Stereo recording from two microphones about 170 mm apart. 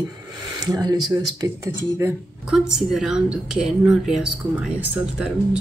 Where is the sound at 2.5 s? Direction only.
5° right (ahead or behind).